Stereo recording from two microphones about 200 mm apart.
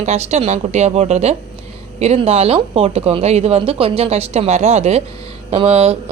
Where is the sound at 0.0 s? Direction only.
35° right (ahead or behind).